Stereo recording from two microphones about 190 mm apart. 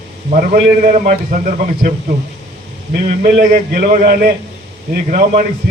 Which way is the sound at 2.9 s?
50° right (ahead or behind).